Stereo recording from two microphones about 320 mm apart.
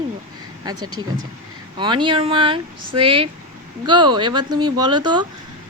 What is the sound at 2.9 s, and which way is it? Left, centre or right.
Speech, right.